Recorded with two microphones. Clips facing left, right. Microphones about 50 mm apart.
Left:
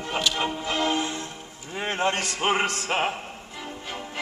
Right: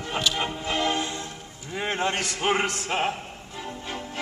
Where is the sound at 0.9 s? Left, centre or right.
Centre.